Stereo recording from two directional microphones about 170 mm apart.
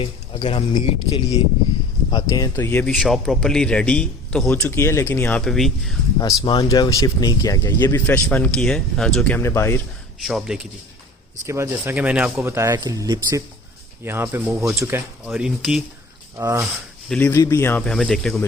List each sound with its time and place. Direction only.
0.0 s speech: 30° left (ahead or behind)
2.6 s speech: 10° left (ahead or behind)
2.9 s a man's voice: centre (ahead or behind)
4.7 s speech: 15° left (ahead or behind)
6.1 s speech: 25° left (ahead or behind)
10.2 s a man's voice: 5° right (ahead or behind)
11.4 s speech: 15° right (ahead or behind)
14.5 s a man's voice: 5° right (ahead or behind)
14.8 s speech: 15° right (ahead or behind)
15.3 s a man's voice: 5° right (ahead or behind)
16.4 s speech: 15° right (ahead or behind)
17.1 s speech: 10° left (ahead or behind)
17.8 s a man's voice: centre (ahead or behind)